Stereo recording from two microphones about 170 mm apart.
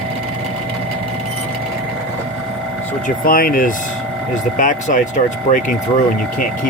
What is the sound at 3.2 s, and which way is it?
Speech, 60° left (ahead or behind).